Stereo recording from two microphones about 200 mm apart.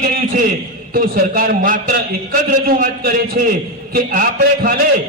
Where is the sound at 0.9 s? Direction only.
50° right (ahead or behind).